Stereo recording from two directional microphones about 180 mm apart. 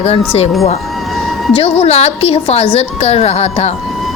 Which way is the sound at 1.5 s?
35° left (ahead or behind).